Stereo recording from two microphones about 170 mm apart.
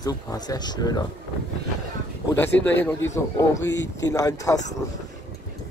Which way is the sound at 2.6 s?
10° left (ahead or behind).